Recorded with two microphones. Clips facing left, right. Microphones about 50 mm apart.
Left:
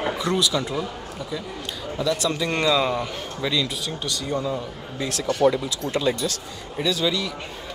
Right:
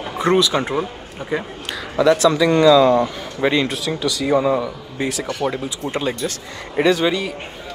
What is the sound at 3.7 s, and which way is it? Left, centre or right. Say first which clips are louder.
Speech: right 7 dB; right.